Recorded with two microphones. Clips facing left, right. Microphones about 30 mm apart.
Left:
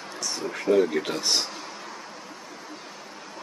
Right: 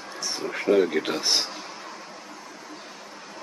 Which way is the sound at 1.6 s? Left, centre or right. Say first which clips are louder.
Even; centre.